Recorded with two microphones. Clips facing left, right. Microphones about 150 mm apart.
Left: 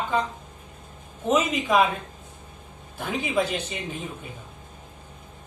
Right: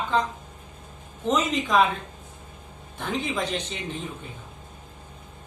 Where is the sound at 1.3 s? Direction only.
10° left (ahead or behind).